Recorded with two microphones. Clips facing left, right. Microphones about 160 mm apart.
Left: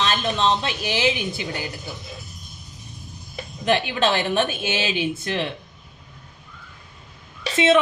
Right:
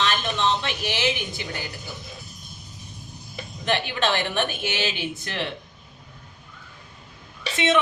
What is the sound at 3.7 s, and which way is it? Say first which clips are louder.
A woman's voice: left 4 dB; 30° left (ahead or behind).